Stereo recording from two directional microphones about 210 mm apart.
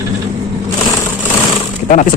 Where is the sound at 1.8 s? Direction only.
40° left (ahead or behind).